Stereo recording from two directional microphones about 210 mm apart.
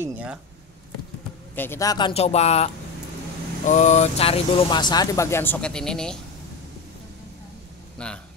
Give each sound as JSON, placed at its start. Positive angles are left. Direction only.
{"t": 0.0, "sound": "speech", "side_deg": -5}
{"t": 1.5, "sound": "speech", "side_deg": 10}
{"t": 8.0, "sound": "speech", "side_deg": 5}